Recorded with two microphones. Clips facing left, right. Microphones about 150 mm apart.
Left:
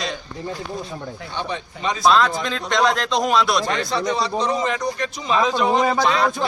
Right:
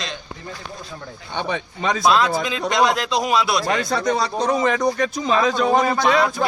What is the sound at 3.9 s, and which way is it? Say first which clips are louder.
A man's voice: right 1 dB; 50° right (ahead or behind).